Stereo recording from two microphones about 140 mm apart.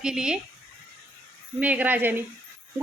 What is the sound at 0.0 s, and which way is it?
Speech, 5° right (ahead or behind).